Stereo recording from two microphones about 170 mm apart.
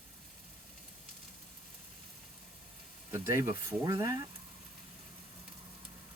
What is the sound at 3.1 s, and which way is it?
Speech, 15° right (ahead or behind).